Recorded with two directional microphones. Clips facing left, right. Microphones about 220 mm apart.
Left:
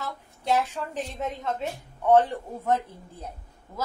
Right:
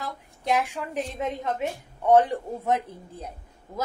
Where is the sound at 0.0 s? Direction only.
15° right (ahead or behind).